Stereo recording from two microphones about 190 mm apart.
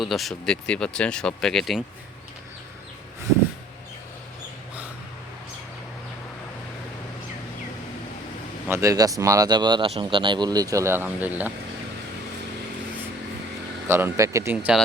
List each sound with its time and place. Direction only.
0.0 s speech: centre (ahead or behind)
8.6 s speech: 15° right (ahead or behind)
13.8 s speech: 15° right (ahead or behind)